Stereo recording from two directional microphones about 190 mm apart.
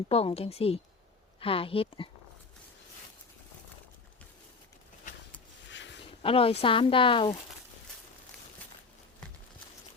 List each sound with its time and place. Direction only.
0.1 s speech: 30° left (ahead or behind)
5.6 s a sound: 70° left (ahead or behind)
6.0 s speech: 30° left (ahead or behind)